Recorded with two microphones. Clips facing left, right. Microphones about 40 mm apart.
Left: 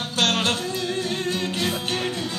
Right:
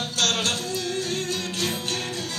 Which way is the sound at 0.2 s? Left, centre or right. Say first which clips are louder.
Left 3 dB; left.